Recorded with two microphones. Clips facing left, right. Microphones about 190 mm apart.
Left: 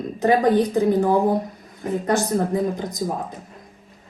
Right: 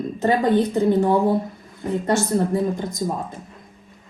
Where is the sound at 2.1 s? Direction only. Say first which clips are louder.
Right 1 dB; 15° left (ahead or behind).